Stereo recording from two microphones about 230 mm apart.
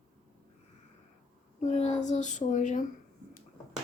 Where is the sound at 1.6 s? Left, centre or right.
Left.